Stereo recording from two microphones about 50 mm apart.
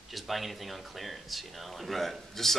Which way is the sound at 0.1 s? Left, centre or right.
Centre.